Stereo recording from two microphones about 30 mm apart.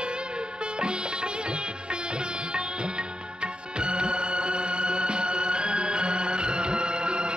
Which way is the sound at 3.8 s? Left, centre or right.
Right.